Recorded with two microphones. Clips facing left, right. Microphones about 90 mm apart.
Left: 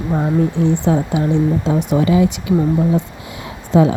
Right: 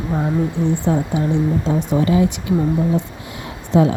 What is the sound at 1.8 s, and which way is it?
Speech, 90° left.